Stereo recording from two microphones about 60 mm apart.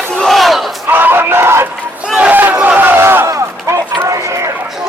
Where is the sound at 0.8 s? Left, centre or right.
Right.